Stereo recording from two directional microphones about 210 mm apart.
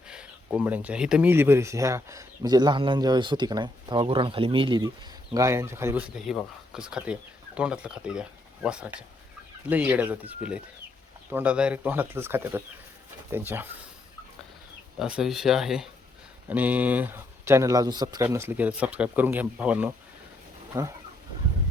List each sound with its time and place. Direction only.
0.1 s speech: 5° right (ahead or behind)
14.9 s speech: 5° right (ahead or behind)